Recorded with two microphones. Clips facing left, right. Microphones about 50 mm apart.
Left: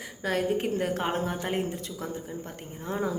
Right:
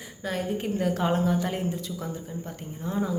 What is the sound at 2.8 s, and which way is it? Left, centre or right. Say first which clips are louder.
Speech: right 1 dB; left.